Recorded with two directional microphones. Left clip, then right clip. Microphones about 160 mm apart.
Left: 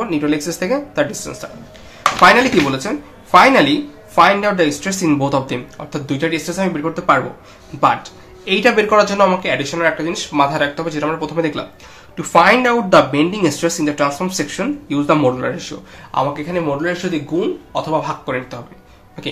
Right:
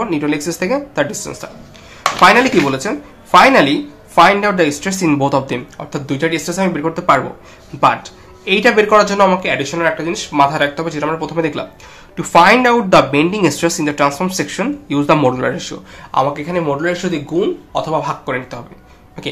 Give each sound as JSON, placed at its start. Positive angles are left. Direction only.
{"t": 0.0, "sound": "speech", "side_deg": -20}